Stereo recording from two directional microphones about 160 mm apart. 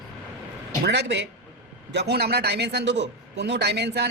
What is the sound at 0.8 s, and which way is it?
A man's voice, 90° right.